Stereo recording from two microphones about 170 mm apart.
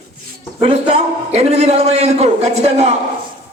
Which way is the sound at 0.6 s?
40° right (ahead or behind).